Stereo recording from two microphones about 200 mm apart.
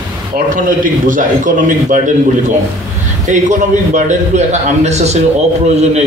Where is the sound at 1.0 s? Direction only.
40° right (ahead or behind).